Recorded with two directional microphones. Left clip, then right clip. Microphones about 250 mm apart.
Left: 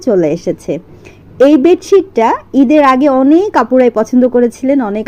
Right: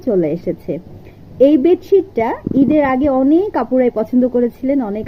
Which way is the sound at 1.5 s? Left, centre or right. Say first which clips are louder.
Left 5 dB; left.